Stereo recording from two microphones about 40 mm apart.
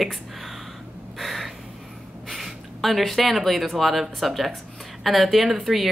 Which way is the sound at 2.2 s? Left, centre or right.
Centre.